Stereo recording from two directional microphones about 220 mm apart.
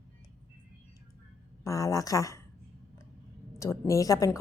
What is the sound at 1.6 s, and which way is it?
Speech, 15° left (ahead or behind).